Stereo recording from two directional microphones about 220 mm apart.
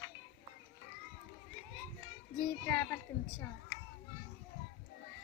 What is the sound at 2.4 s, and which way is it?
Speech, 10° left (ahead or behind).